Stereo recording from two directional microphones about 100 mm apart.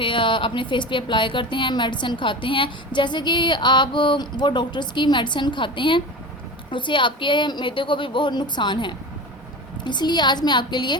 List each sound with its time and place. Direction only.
0.0 s a woman's voice: 55° left (ahead or behind)